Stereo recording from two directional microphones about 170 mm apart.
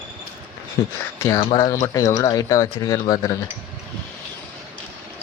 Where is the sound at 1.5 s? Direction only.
20° left (ahead or behind).